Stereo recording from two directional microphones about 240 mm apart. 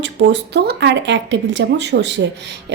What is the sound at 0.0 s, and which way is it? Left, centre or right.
Speech, right.